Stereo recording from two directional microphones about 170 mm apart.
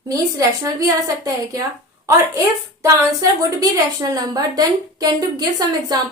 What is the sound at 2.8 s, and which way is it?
A woman's voice, 20° right (ahead or behind).